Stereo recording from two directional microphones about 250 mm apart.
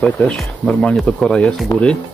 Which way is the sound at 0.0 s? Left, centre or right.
Centre.